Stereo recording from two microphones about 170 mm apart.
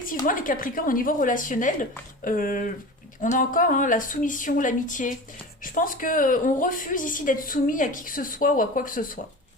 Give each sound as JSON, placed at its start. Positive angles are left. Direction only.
{"t": 0.3, "sound": "a woman's voice", "side_deg": 55}